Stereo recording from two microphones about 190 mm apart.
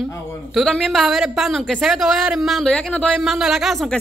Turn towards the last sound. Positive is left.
turn(degrees=0)  # may be behind; listen again after turning